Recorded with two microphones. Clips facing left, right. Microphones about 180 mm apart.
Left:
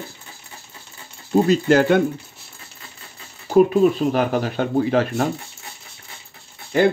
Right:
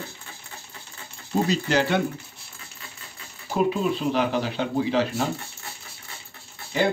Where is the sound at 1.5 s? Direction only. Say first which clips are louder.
Left 8 dB; 50° left (ahead or behind).